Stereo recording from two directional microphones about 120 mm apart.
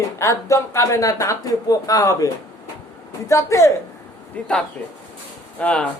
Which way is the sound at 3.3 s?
25° left (ahead or behind).